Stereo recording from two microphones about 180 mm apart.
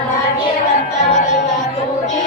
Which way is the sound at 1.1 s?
40° left (ahead or behind).